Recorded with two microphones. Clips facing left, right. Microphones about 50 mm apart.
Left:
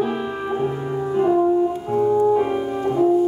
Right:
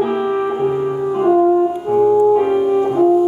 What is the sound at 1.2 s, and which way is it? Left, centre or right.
Music, centre.